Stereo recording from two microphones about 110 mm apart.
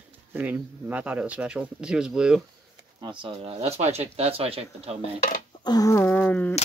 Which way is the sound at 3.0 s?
50° right (ahead or behind).